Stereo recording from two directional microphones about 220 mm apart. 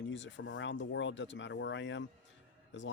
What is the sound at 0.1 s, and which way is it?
Speech, 55° left (ahead or behind).